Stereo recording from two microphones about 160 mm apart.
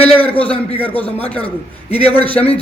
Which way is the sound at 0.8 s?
10° left (ahead or behind).